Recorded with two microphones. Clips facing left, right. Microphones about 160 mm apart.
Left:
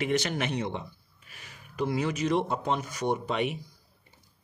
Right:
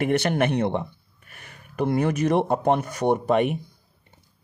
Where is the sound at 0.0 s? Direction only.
60° right (ahead or behind).